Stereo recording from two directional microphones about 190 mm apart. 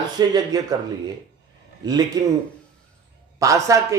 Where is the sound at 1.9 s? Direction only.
20° right (ahead or behind).